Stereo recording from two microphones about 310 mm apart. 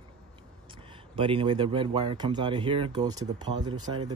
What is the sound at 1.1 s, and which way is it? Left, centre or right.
Speech, centre.